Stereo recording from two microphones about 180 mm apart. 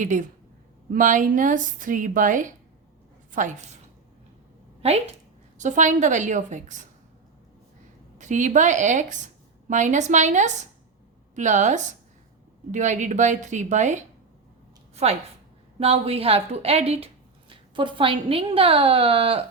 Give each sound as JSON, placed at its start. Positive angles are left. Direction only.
{"t": 0.0, "sound": "a woman's voice", "side_deg": -45}
{"t": 4.8, "sound": "a woman's voice", "side_deg": -35}
{"t": 8.2, "sound": "a woman's voice", "side_deg": -45}